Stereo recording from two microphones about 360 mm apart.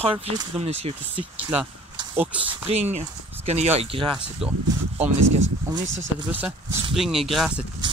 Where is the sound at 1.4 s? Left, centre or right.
Centre.